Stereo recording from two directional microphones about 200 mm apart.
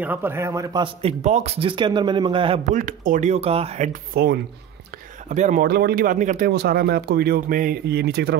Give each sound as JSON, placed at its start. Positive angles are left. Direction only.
{"t": 0.0, "sound": "a man's voice", "side_deg": -10}
{"t": 1.0, "sound": "a man's voice", "side_deg": -35}
{"t": 2.7, "sound": "speech", "side_deg": -40}
{"t": 5.3, "sound": "speech", "side_deg": -35}